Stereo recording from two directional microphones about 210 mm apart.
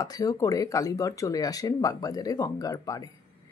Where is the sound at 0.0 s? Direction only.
15° left (ahead or behind).